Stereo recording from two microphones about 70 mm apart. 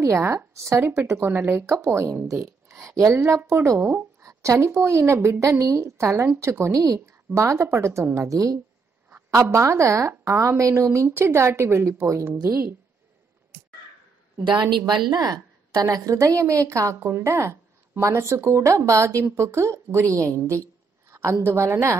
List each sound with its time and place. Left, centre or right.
0.2 s a woman's voice: right
1.3 s speech: right
1.6 s speech: right
3.2 s speech: right
4.2 s a sound: right
4.6 s a woman's voice: right
8.3 s a woman's voice: right
14.9 s a woman's voice: right